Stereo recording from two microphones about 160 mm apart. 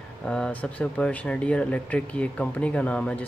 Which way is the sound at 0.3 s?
5° left (ahead or behind).